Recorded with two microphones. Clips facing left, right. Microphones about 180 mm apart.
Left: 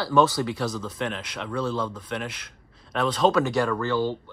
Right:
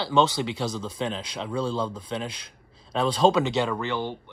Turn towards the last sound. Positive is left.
turn(degrees=-20)  # may be behind; listen again after turning